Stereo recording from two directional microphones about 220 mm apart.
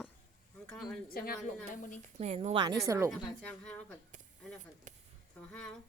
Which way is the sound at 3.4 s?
5° left (ahead or behind).